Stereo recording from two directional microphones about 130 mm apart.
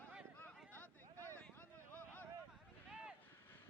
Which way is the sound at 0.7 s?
15° left (ahead or behind).